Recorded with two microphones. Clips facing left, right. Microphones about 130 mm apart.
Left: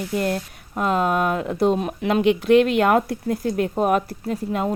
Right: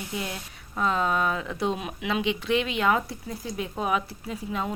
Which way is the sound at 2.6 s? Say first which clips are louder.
Left 8 dB; 50° left (ahead or behind).